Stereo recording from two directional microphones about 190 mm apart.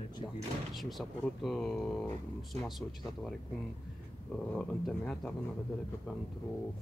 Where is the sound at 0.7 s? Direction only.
Centre (ahead or behind).